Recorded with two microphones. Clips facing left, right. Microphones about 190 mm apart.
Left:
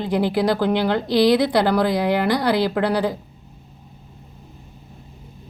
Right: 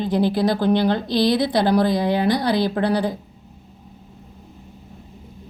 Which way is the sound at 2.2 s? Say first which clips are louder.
Even; 65° left (ahead or behind).